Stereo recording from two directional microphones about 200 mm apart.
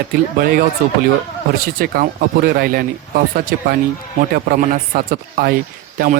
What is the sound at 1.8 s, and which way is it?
Speech, 45° right (ahead or behind).